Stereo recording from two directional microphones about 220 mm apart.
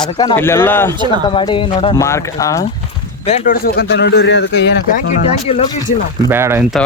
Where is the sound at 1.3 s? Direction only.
20° left (ahead or behind).